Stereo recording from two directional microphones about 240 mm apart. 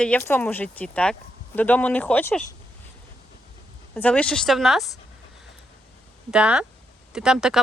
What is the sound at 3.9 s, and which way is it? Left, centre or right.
Speech, centre.